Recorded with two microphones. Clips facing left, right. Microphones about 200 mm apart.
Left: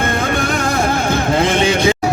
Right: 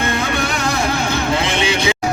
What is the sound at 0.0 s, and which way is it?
Music, 50° left (ahead or behind).